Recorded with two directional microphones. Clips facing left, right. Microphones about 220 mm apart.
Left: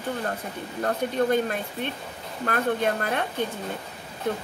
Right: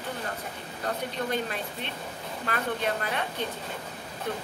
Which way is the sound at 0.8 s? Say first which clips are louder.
Left 7 dB; 50° left (ahead or behind).